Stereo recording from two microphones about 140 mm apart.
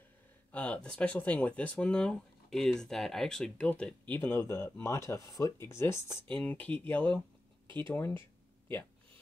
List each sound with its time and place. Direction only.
0.5 s speech: 10° left (ahead or behind)